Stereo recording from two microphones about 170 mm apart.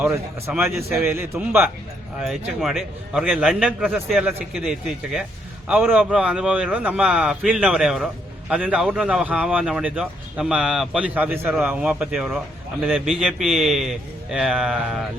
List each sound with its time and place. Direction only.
0.0 s speech: 15° right (ahead or behind)
2.1 s a man's voice: 5° right (ahead or behind)